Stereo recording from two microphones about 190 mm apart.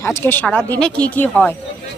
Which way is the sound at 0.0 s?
10° left (ahead or behind).